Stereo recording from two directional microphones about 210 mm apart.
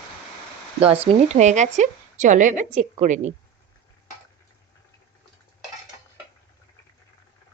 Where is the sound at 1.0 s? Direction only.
35° right (ahead or behind).